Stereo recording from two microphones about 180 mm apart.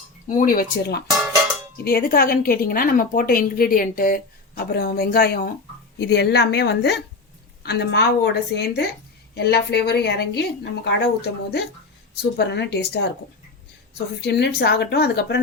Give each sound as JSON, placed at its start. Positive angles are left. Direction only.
{"t": 0.3, "sound": "a woman's voice", "side_deg": 50}
{"t": 14.2, "sound": "a woman's voice", "side_deg": 70}